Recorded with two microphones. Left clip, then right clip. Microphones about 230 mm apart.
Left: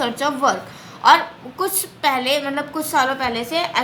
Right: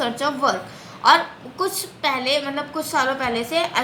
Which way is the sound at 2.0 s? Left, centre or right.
Left.